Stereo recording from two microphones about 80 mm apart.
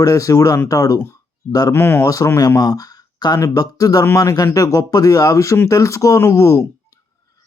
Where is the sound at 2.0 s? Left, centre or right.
Left.